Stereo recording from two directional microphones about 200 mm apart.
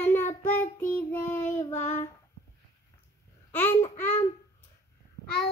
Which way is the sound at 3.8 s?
35° left (ahead or behind).